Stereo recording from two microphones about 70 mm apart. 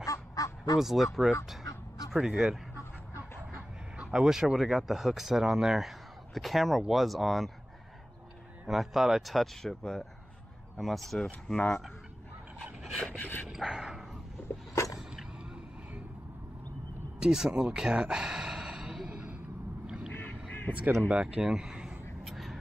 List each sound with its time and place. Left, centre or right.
0.0 s duck: left
0.7 s speech: centre
2.7 s duck: right
4.0 s speech: centre
8.6 s speech: centre
13.0 s filing: centre
13.5 s a sound: centre
17.2 s a sound: centre
20.1 s boat: left
21.1 s speech: centre
22.2 s quack: centre